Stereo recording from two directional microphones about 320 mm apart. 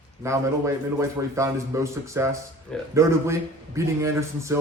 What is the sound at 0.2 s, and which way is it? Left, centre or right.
A man's voice, centre.